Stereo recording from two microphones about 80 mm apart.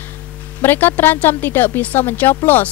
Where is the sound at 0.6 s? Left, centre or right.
Left.